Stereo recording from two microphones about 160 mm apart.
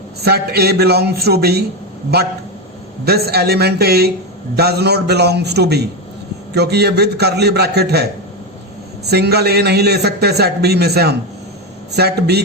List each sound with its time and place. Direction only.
0.3 s speech: 80° right
4.5 s a man's voice: 90° right
9.0 s a man's voice: 90° right